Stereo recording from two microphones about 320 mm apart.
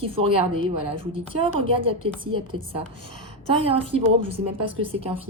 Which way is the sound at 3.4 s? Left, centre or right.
Centre.